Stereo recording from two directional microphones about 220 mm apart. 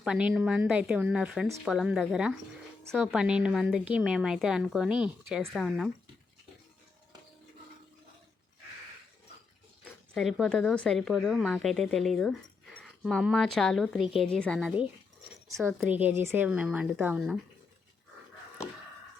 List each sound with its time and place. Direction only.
0.0 s a woman's voice: 5° right (ahead or behind)
10.2 s a woman's voice: centre (ahead or behind)
15.6 s a woman's voice: 10° right (ahead or behind)